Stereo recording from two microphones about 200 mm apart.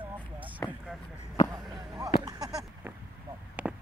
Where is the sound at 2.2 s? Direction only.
20° right (ahead or behind).